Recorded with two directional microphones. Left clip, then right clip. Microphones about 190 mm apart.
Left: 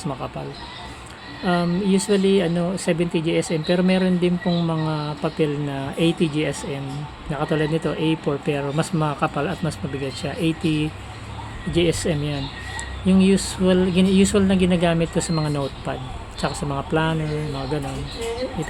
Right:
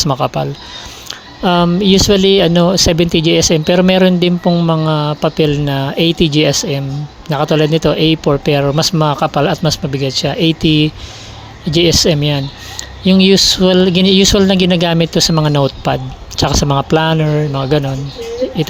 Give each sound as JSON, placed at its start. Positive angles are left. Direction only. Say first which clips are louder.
{"t": 0.0, "sound": "speech", "louder": "right 15 dB", "side_deg": -60}
{"t": 1.5, "sound": "speech", "louder": "right 11 dB", "side_deg": -55}